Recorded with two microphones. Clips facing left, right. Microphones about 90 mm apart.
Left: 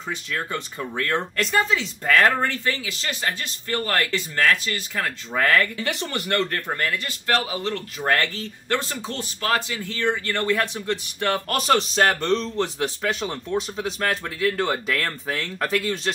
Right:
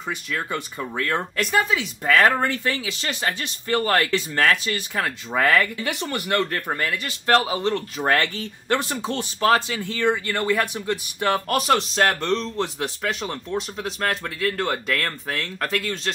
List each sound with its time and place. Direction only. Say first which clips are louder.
0.1 s speech: right 1 dB; 10° right (ahead or behind)